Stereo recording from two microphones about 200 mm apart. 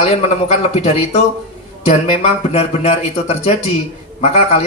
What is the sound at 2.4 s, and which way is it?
Speech, 30° left (ahead or behind).